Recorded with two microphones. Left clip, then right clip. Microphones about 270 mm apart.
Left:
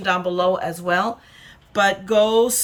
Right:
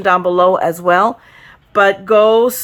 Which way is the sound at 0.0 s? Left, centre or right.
Centre.